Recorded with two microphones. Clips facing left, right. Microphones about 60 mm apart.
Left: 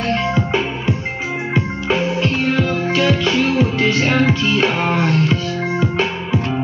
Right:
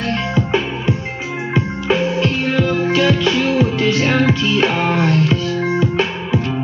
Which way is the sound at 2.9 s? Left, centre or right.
Centre.